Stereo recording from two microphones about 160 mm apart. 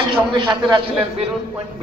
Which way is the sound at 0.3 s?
30° right (ahead or behind).